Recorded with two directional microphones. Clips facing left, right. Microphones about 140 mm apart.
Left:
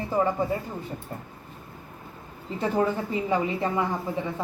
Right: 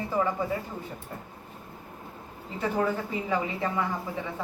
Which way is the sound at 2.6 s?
25° left (ahead or behind).